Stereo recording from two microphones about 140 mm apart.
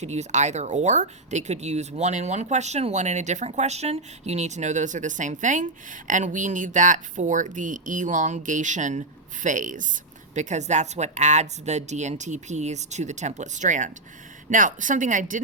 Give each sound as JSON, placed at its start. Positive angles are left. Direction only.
{"t": 0.0, "sound": "speech", "side_deg": -55}